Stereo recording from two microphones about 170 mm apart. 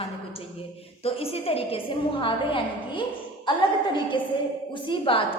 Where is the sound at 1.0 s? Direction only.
35° left (ahead or behind).